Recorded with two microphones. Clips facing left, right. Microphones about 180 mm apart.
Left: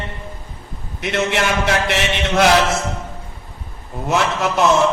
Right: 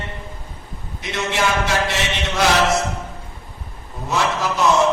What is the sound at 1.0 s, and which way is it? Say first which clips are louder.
Speech: left 3 dB; 60° left (ahead or behind).